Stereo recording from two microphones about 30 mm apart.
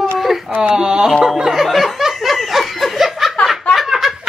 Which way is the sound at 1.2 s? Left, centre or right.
Centre.